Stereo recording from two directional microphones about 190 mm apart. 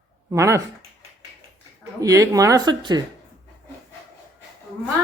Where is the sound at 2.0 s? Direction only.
15° right (ahead or behind).